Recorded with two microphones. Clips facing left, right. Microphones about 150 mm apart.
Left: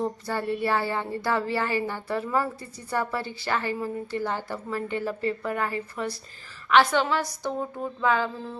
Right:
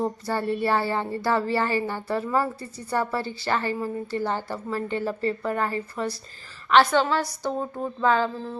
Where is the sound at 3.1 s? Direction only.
15° left (ahead or behind).